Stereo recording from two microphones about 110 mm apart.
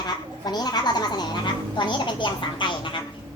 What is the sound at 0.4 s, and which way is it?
A woman's voice, 40° left (ahead or behind).